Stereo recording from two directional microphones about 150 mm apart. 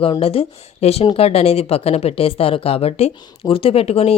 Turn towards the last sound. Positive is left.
turn(degrees=40)  # may be behind; listen again after turning